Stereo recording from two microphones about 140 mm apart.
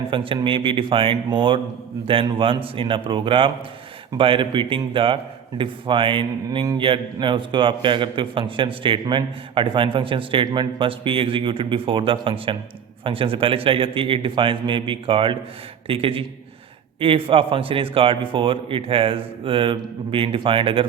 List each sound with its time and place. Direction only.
0.1 s a man's voice: 35° right (ahead or behind)